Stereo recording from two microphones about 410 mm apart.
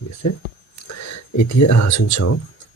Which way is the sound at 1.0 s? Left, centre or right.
Left.